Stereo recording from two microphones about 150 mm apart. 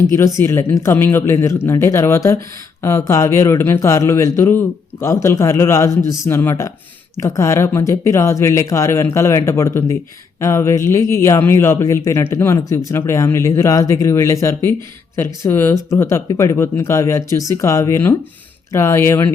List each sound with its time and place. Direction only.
0.0 s a man's voice: 15° left (ahead or behind)